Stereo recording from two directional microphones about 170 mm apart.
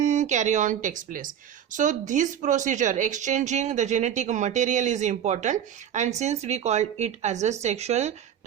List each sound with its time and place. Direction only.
0.0 s speech: 45° right (ahead or behind)